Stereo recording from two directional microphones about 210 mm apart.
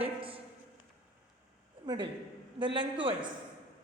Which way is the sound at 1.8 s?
20° right (ahead or behind).